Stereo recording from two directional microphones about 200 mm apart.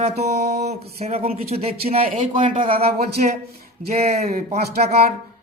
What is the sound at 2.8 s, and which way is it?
Speech, 50° right (ahead or behind).